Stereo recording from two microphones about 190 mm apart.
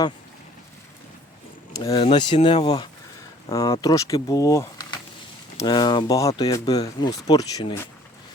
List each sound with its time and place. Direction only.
1.8 s speech: 25° left (ahead or behind)
3.5 s speech: 15° left (ahead or behind)